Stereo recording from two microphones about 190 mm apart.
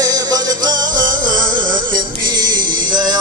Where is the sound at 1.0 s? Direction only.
45° right (ahead or behind).